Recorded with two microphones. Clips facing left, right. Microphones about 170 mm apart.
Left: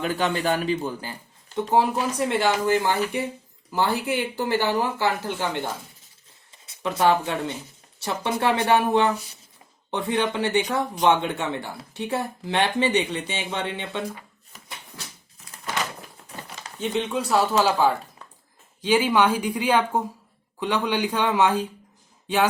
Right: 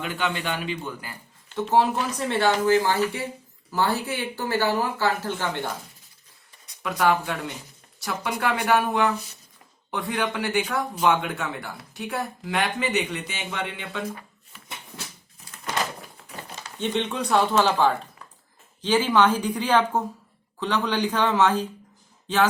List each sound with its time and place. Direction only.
0.0 s a man's voice: 40° left (ahead or behind)
1.7 s speech: 15° left (ahead or behind)
6.8 s speech: 25° left (ahead or behind)
16.7 s speech: 5° left (ahead or behind)